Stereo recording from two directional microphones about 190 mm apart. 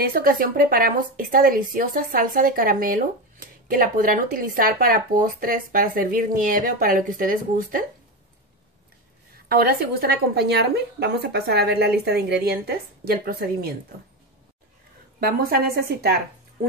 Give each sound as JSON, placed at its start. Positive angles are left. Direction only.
{"t": 0.0, "sound": "a woman's voice", "side_deg": -50}
{"t": 9.5, "sound": "a woman's voice", "side_deg": -50}
{"t": 15.1, "sound": "a woman's voice", "side_deg": -55}